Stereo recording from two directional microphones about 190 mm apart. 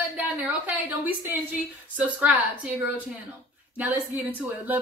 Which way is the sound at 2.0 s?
5° right (ahead or behind).